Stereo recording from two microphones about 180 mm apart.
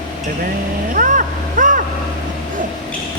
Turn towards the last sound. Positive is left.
turn(degrees=-45)  # may be behind; listen again after turning